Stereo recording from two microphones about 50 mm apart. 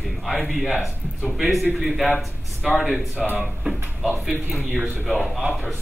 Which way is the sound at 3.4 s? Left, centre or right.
Centre.